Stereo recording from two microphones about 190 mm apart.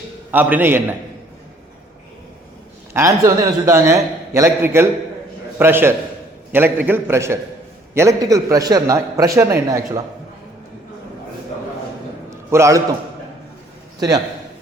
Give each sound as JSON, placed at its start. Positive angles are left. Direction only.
{"t": 0.3, "sound": "a man's voice", "side_deg": -10}
{"t": 2.9, "sound": "a man's voice", "side_deg": -15}
{"t": 12.3, "sound": "a sound", "side_deg": -15}